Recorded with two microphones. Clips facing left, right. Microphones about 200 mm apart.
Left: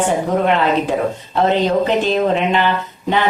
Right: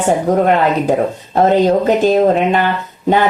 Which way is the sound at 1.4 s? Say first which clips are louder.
Right 4 dB; 45° right (ahead or behind).